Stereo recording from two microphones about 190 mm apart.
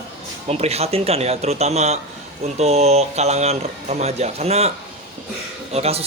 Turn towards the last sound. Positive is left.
turn(degrees=-35)  # may be behind; listen again after turning